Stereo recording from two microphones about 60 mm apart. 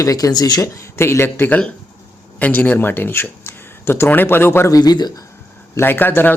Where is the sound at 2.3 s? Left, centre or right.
Left.